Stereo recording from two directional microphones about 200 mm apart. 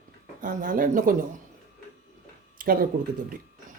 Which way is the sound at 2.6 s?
45° right (ahead or behind).